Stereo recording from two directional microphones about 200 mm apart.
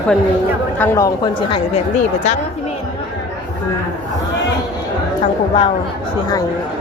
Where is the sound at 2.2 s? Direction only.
35° left (ahead or behind).